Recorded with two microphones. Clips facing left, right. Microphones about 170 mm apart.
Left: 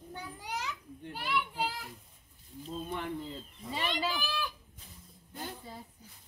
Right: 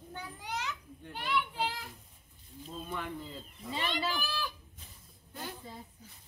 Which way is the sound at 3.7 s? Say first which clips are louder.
Left 1 dB; 15° left (ahead or behind).